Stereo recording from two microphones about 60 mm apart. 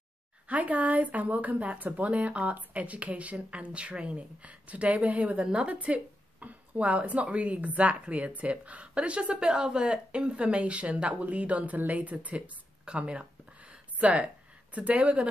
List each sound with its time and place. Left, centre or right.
0.5 s speech: right